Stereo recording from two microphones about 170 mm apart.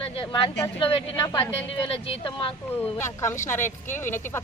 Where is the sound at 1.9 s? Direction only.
35° left (ahead or behind).